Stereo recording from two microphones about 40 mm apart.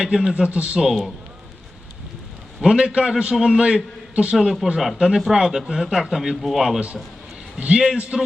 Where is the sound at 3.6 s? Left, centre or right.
Right.